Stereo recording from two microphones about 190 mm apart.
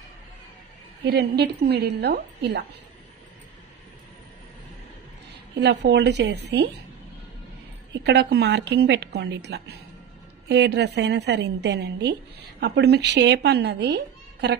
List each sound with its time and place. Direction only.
1.0 s a woman's voice: 60° right (ahead or behind)
5.6 s a woman's voice: 65° right (ahead or behind)
8.0 s a woman's voice: 60° right (ahead or behind)